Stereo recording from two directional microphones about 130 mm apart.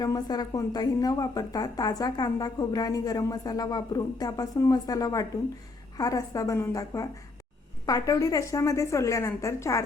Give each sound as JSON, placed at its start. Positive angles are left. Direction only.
{"t": 0.0, "sound": "a woman's voice", "side_deg": 30}